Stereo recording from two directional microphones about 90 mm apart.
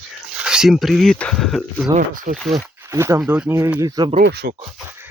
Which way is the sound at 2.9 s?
40° right (ahead or behind).